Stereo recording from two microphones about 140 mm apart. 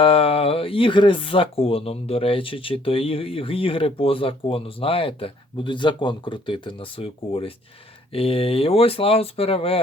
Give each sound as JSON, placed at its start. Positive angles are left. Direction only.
{"t": 0.0, "sound": "speech", "side_deg": 40}